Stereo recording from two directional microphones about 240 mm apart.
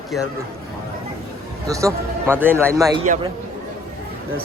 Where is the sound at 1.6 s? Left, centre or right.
Centre.